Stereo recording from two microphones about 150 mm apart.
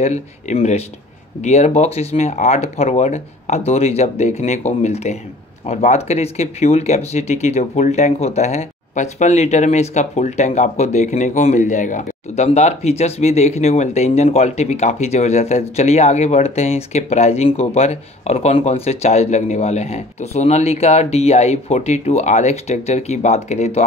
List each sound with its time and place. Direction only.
0.0 s speech: 50° left (ahead or behind)